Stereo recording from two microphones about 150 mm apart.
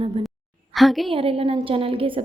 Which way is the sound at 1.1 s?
40° right (ahead or behind).